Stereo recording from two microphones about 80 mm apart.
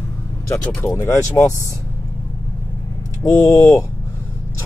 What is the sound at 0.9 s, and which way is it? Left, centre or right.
Speech, left.